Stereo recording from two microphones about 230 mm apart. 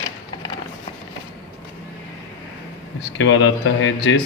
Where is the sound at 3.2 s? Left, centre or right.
Left.